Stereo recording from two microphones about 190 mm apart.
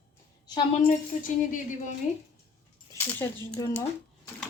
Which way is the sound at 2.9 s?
15° left (ahead or behind).